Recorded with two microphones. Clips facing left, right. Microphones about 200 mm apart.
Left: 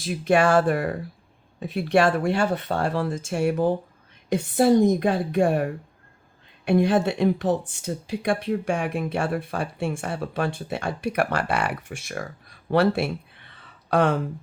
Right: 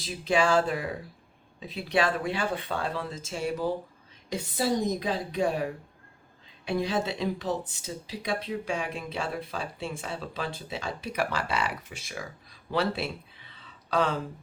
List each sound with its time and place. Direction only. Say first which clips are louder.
0.1 s speech: left 5 dB; 60° left (ahead or behind)
2.7 s speech: left 7 dB; 65° left (ahead or behind)